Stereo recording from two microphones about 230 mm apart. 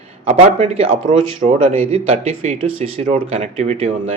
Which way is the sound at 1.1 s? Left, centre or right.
Right.